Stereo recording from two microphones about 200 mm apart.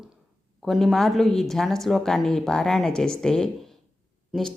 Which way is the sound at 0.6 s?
Centre (ahead or behind).